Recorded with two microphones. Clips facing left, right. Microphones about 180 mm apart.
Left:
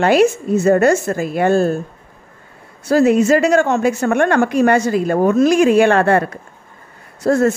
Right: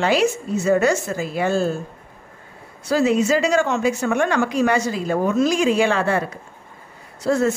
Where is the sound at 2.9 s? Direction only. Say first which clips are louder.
Left 5 dB; 55° left (ahead or behind).